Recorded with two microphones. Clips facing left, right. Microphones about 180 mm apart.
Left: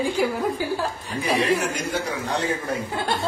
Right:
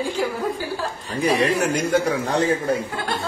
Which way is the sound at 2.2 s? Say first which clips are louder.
Right 5 dB; 45° right (ahead or behind).